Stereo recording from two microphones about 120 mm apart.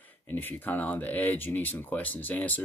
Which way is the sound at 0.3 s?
15° left (ahead or behind).